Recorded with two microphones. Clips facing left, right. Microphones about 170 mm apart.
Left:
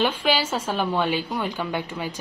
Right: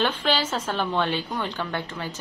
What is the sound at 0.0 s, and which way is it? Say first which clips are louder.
A woman's voice: left 2 dB; 10° left (ahead or behind).